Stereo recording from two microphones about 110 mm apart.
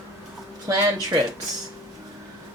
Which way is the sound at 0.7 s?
30° right (ahead or behind).